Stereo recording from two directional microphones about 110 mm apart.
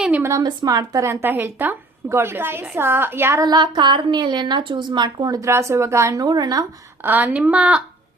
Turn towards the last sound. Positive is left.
turn(degrees=-10)  # may be behind; listen again after turning